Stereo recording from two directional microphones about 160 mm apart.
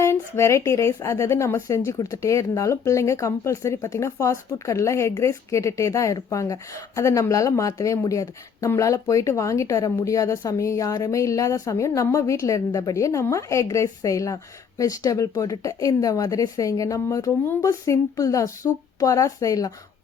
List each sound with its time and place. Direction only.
0.0 s speech: 20° left (ahead or behind)